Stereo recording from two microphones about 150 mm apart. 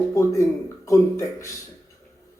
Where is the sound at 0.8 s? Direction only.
20° left (ahead or behind).